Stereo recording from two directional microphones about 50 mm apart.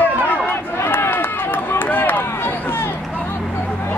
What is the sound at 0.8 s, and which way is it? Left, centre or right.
Run, left.